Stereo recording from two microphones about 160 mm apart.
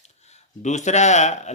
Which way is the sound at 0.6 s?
45° left (ahead or behind).